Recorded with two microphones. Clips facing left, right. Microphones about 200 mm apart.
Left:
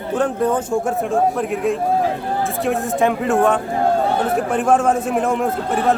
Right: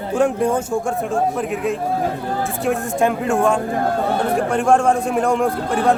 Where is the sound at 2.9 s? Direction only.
Centre (ahead or behind).